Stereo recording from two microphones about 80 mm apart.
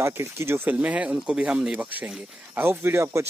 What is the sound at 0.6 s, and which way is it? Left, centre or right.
Speech, centre.